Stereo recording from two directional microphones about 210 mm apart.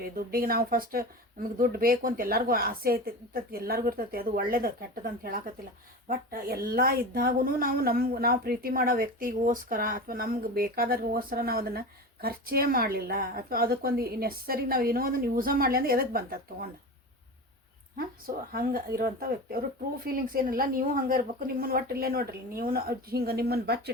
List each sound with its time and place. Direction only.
0.0 s speech: 45° right (ahead or behind)
18.5 s speech: 45° right (ahead or behind)